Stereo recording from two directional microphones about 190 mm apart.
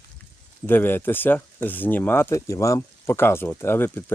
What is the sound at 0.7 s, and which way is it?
Speech, 10° left (ahead or behind).